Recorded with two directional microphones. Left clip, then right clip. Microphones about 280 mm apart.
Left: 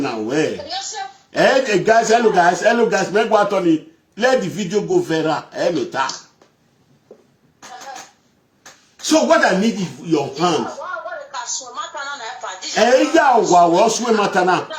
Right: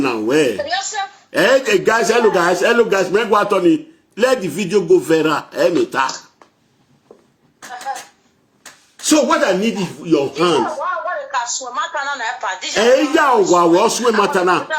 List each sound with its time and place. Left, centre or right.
0.0 s a man's voice: centre
7.1 s cough: centre
9.0 s a man's voice: centre
10.8 s a sound: right
12.8 s a man's voice: centre